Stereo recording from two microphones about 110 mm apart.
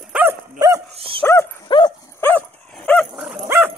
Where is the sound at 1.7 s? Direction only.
45° left (ahead or behind).